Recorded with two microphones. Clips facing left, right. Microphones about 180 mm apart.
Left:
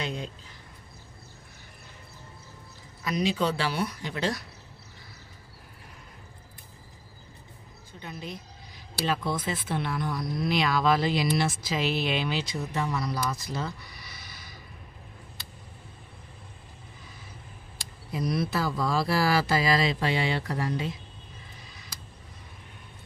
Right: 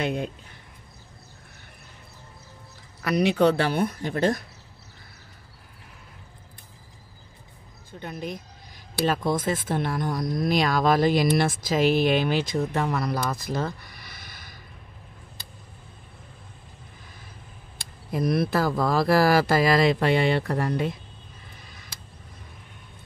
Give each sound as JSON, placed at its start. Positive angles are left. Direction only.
{"t": 0.0, "sound": "speech", "side_deg": -60}
{"t": 3.0, "sound": "speech", "side_deg": -65}
{"t": 8.0, "sound": "speech", "side_deg": -50}
{"t": 18.1, "sound": "speech", "side_deg": -55}